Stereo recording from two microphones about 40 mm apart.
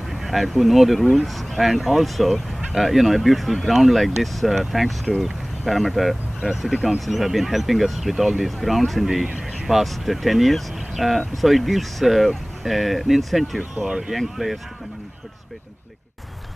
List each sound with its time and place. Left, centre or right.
0.1 s speech: centre
6.7 s speech: centre
7.1 s speech: centre
13.8 s speech: right
14.1 s speech: centre